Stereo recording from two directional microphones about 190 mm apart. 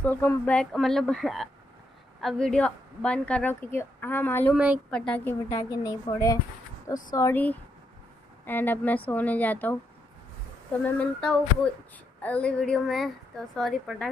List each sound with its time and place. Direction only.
0.0 s a woman's voice: 10° left (ahead or behind)
5.5 s a woman's voice: 20° left (ahead or behind)
10.8 s a woman's voice: 5° left (ahead or behind)